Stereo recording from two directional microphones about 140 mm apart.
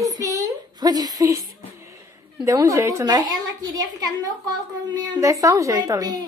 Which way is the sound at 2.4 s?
20° right (ahead or behind).